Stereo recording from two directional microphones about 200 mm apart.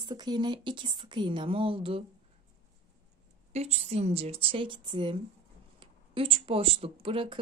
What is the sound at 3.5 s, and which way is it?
Speech, 30° right (ahead or behind).